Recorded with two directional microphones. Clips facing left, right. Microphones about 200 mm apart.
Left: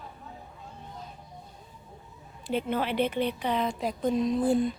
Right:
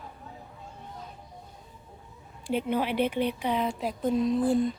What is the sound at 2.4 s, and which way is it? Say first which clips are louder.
Speech: right 1 dB; 10° right (ahead or behind).